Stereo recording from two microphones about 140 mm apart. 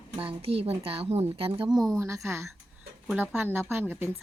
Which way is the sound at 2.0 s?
20° right (ahead or behind).